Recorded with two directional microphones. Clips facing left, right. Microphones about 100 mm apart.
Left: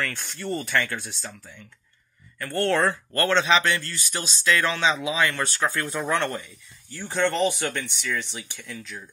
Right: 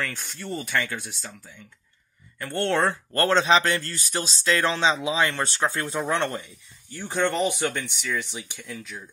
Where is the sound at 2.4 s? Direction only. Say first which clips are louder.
Left 1 dB; 20° right (ahead or behind).